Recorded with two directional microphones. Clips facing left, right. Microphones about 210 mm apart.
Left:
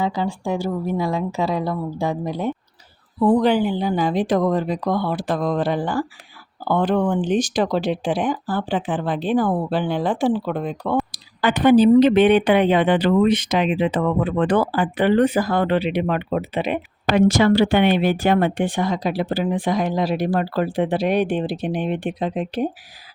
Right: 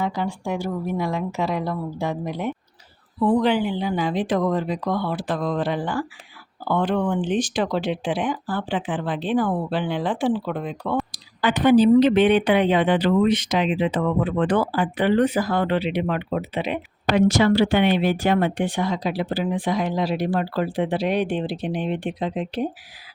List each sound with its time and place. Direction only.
0.0 s speech: 30° left (ahead or behind); by 22.7 s 50° left (ahead or behind)